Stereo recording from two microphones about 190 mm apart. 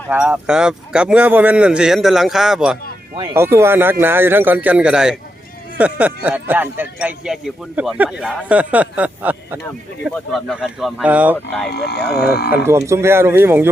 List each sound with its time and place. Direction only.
0.1 s speech: 5° right (ahead or behind)
11.7 s speech: 60° left (ahead or behind)
12.6 s speech: 15° right (ahead or behind)